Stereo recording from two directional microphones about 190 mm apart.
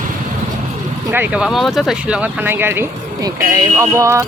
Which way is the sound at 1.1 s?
10° right (ahead or behind).